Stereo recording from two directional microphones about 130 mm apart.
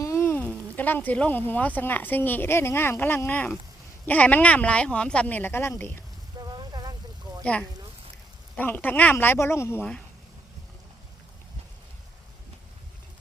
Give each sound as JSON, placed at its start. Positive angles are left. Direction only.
{"t": 0.0, "sound": "speech", "side_deg": 20}
{"t": 6.4, "sound": "boat", "side_deg": -30}
{"t": 7.3, "sound": "a sound", "side_deg": -30}
{"t": 8.5, "sound": "speech", "side_deg": 15}